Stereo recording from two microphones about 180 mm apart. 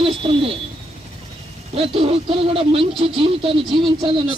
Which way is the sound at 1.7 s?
30° right (ahead or behind).